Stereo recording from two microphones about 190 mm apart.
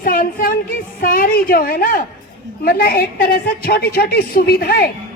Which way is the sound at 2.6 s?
50° left (ahead or behind).